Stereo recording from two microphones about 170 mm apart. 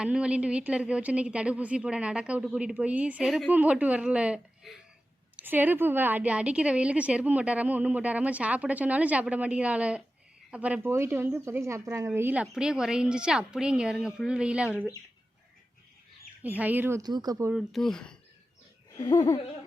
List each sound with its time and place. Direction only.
0.0 s a woman's voice: 5° right (ahead or behind)
16.4 s a woman's voice: 10° right (ahead or behind)
17.5 s speech: centre (ahead or behind)
18.9 s laughter: 25° left (ahead or behind)